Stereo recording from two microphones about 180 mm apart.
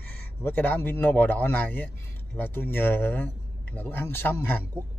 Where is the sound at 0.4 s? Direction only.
10° left (ahead or behind).